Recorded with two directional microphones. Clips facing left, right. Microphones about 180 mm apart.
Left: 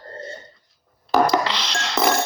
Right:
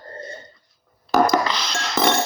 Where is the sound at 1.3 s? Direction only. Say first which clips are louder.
Right 1 dB; 30° left (ahead or behind).